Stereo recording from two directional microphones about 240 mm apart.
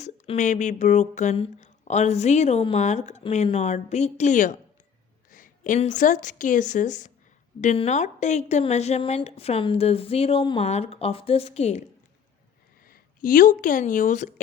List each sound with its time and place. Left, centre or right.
0.0 s a woman's voice: left
12.9 s speech: left